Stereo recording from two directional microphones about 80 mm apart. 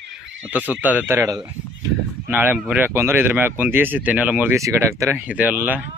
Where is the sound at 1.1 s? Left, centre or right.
Right.